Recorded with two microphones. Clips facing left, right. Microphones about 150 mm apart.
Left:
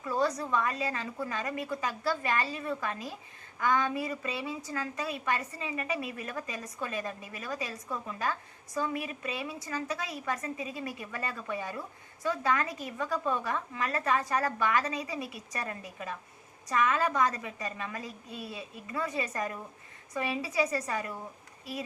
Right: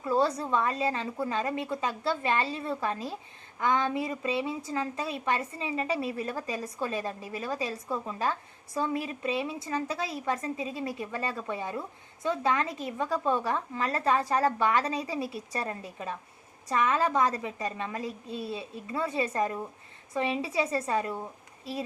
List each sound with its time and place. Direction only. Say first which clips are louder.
0.0 s a woman's voice: right 3 dB; 30° right (ahead or behind)